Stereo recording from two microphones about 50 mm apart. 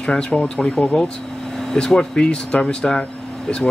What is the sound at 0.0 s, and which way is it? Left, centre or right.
Speech, left.